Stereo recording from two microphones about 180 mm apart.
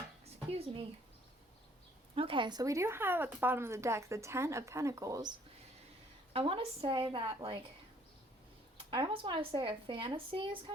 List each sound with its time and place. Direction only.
0.3 s a sound: 30° right (ahead or behind)
2.1 s speech: 30° right (ahead or behind)
6.3 s a woman's voice: 30° right (ahead or behind)
8.9 s a woman's voice: 25° right (ahead or behind)